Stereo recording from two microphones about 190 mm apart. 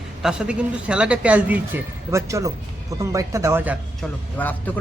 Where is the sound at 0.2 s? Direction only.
5° right (ahead or behind).